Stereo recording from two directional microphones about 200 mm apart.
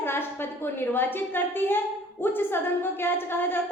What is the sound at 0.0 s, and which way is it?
A woman's voice, 10° left (ahead or behind).